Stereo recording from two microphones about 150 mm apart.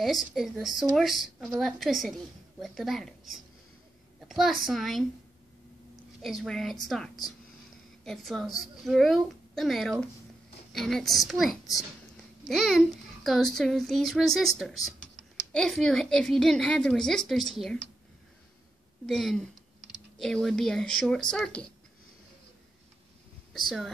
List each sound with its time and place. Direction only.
0.0 s a woman's voice: centre (ahead or behind)
4.3 s a woman's voice: centre (ahead or behind)
6.2 s a woman's voice: centre (ahead or behind)
19.0 s a woman's voice: centre (ahead or behind)